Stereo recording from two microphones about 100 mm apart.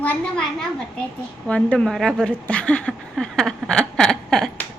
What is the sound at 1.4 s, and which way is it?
Speech, 10° left (ahead or behind).